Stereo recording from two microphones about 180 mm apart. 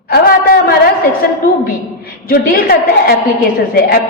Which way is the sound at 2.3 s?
55° left (ahead or behind).